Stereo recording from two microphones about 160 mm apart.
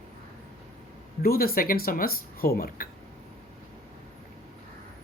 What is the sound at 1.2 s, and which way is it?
Speech, 70° left (ahead or behind).